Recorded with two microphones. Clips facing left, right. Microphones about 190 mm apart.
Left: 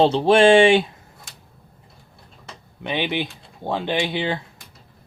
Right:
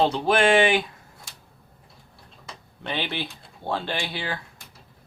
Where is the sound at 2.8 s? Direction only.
15° left (ahead or behind).